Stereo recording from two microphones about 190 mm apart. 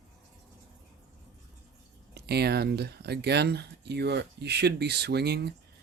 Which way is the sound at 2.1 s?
55° right (ahead or behind).